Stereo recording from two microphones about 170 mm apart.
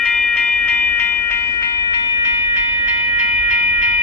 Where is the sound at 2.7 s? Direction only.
30° left (ahead or behind).